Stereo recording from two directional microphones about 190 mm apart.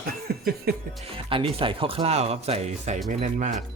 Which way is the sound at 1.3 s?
30° right (ahead or behind).